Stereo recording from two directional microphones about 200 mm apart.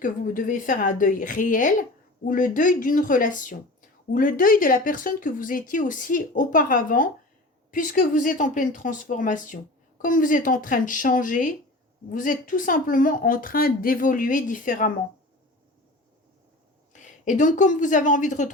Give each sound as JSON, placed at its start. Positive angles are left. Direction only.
{"t": 0.0, "sound": "speech", "side_deg": 40}
{"t": 16.9, "sound": "speech", "side_deg": 40}